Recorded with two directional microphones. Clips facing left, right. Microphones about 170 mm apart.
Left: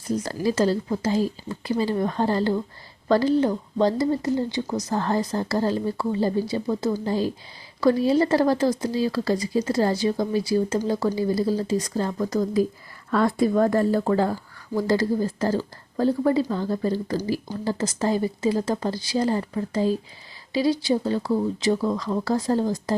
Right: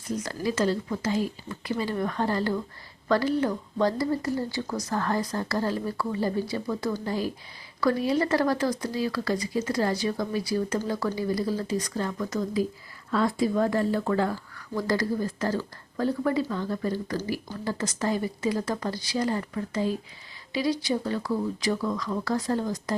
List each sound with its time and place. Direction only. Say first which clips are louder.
0.4 s speech: left 4 dB; 35° left (ahead or behind)
13.1 s speech: left 4 dB; 55° left (ahead or behind)
14.0 s speech: left 4 dB; 30° left (ahead or behind)